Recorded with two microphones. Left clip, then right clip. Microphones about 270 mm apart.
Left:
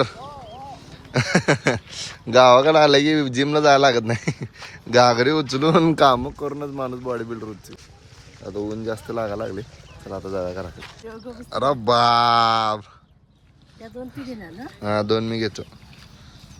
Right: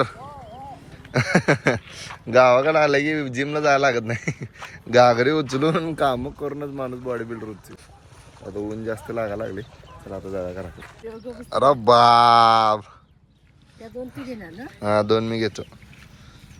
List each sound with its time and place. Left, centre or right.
0.2 s a sound: left
1.1 s speech: centre
5.8 s speech: left
6.2 s speech: centre
8.9 s speech: centre
14.2 s speech: centre